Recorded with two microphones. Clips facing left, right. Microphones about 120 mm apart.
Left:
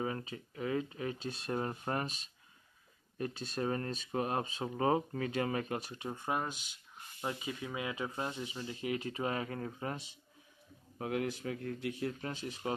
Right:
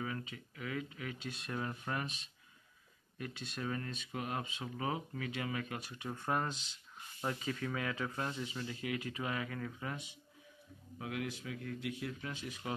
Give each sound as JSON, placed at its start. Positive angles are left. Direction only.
{"t": 0.0, "sound": "speech", "side_deg": 35}